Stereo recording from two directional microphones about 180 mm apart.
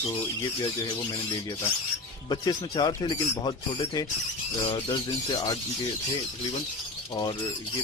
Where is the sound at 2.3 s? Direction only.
20° left (ahead or behind).